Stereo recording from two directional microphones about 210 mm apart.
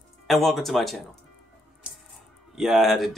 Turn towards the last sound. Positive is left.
turn(degrees=0)  # may be behind; listen again after turning